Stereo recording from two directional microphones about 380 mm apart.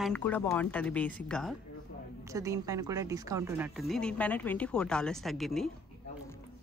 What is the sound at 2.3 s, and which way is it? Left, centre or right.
Speech, centre.